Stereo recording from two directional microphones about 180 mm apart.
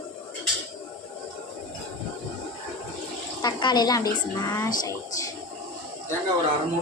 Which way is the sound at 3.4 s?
25° left (ahead or behind).